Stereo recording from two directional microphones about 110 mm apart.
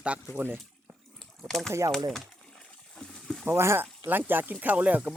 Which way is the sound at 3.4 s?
20° right (ahead or behind).